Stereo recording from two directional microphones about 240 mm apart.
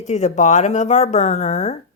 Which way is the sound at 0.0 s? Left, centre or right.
Left.